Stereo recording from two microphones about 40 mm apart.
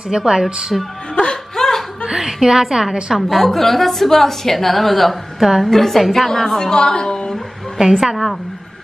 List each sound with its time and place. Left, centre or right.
0.1 s speech: centre
1.1 s laughter: centre
2.0 s a woman's voice: centre
3.2 s a woman's voice: centre
6.7 s a woman's voice: centre
8.0 s a woman's voice: centre